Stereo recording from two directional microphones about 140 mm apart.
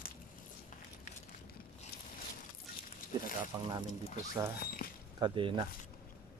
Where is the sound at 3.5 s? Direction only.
25° right (ahead or behind).